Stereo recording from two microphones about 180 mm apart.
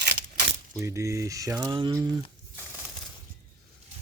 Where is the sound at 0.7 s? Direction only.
15° right (ahead or behind).